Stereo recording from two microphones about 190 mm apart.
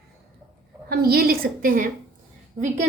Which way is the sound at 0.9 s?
50° right (ahead or behind).